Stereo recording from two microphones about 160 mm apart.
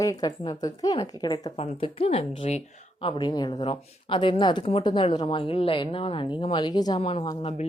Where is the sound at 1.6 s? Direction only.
35° left (ahead or behind).